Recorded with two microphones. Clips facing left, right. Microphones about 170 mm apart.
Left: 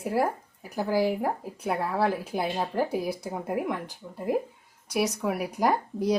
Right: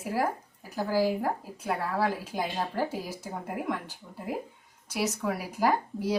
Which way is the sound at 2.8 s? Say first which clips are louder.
Left 6 dB; 15° left (ahead or behind).